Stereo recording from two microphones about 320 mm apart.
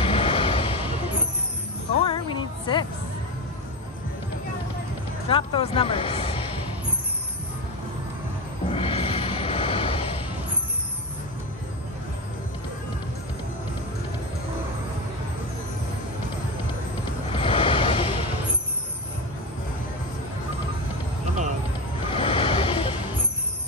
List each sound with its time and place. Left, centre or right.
0.0 s vehicle: centre
2.0 s music: centre
5.3 s speech: centre
8.7 s music: centre
17.3 s music: centre
22.1 s a sound: centre